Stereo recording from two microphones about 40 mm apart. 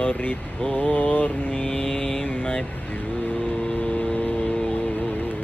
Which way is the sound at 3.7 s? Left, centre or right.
Left.